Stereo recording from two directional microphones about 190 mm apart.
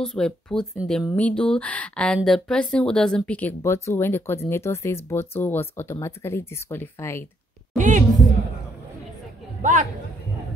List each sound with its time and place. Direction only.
0.0 s speech: 5° left (ahead or behind)
7.7 s a sound: 40° right (ahead or behind)
9.6 s speech: 40° right (ahead or behind)